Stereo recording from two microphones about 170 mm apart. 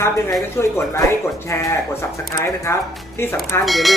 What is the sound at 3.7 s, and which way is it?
Speech, centre (ahead or behind).